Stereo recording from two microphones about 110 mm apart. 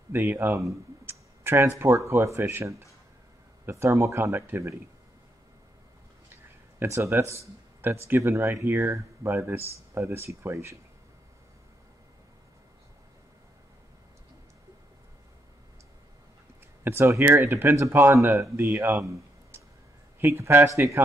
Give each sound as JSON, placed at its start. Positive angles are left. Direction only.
{"t": 0.1, "sound": "speech", "side_deg": -20}
{"t": 6.8, "sound": "speech", "side_deg": -25}
{"t": 16.8, "sound": "speech", "side_deg": -20}